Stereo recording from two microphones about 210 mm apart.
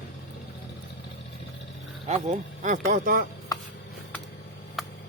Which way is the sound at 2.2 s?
40° right (ahead or behind).